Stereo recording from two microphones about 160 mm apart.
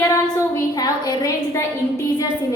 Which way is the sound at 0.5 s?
25° left (ahead or behind).